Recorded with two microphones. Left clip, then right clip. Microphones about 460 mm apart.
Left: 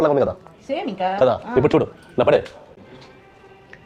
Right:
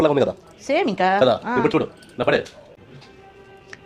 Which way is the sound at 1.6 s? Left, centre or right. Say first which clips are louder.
Left 3 dB; left.